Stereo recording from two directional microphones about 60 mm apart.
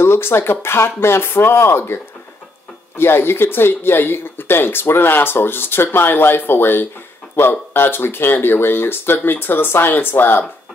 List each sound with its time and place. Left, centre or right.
0.0 s speech: left
3.0 s speech: left